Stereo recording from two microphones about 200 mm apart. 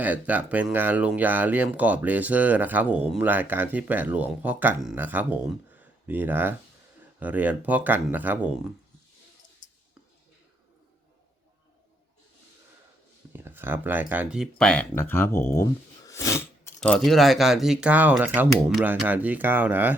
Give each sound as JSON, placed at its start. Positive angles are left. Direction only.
{"t": 0.0, "sound": "speech", "side_deg": -10}
{"t": 9.6, "sound": "clicking", "side_deg": 40}
{"t": 13.3, "sound": "speech", "side_deg": -10}